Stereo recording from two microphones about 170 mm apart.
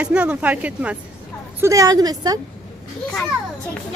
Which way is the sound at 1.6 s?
20° right (ahead or behind).